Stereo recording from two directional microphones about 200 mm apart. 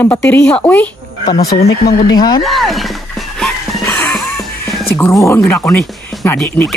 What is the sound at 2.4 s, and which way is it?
Music, centre (ahead or behind).